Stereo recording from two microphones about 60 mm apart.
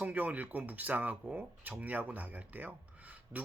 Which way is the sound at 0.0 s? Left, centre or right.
Right.